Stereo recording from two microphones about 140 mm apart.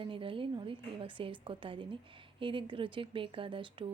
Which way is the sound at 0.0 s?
40° right (ahead or behind).